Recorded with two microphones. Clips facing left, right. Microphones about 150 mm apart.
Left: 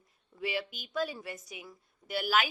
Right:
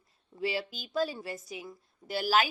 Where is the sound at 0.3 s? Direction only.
30° right (ahead or behind).